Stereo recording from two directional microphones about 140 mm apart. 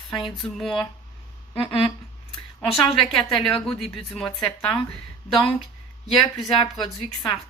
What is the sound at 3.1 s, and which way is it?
Speech, 5° left (ahead or behind).